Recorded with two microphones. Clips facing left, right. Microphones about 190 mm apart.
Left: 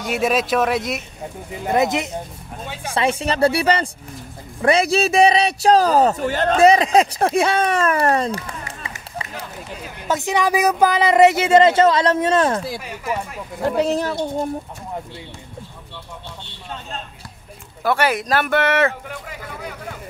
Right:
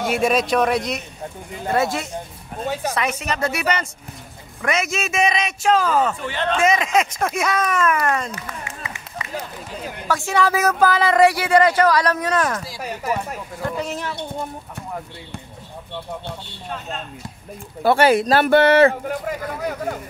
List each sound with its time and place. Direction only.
0.1 s speech: centre (ahead or behind)
1.7 s speech: 20° left (ahead or behind)
2.6 s speech: 40° right (ahead or behind)
2.9 s a man's voice: 30° left (ahead or behind)
10.0 s speech: 20° left (ahead or behind)
12.8 s speech: 40° right (ahead or behind)
13.8 s a man's voice: 35° left (ahead or behind)
17.8 s speech: 30° right (ahead or behind)